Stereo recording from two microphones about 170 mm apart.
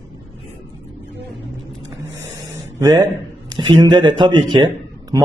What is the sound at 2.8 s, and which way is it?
Speech, 25° right (ahead or behind).